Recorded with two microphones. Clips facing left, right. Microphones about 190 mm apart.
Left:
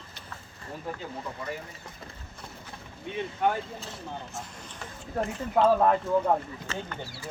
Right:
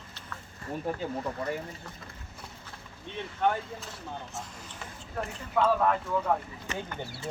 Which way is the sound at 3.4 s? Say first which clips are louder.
Even; 10° left (ahead or behind).